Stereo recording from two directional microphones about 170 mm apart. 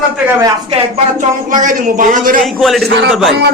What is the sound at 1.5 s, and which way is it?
Speech, 50° right (ahead or behind).